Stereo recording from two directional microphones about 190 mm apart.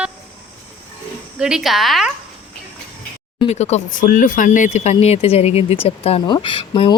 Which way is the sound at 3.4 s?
35° left (ahead or behind).